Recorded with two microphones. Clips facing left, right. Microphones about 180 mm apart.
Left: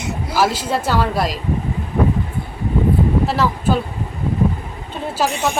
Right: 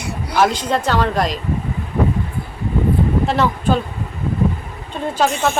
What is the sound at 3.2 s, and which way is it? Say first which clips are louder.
Speech: right 1 dB; 5° left (ahead or behind).